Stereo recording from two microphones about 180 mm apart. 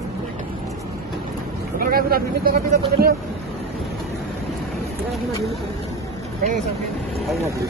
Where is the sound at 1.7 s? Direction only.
55° right (ahead or behind).